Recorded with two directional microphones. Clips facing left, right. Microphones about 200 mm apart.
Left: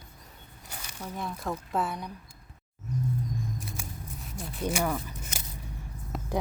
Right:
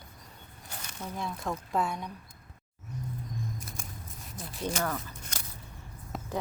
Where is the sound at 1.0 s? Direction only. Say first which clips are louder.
Left 1 dB; centre (ahead or behind).